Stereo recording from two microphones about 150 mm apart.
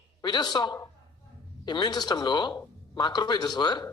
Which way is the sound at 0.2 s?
30° left (ahead or behind).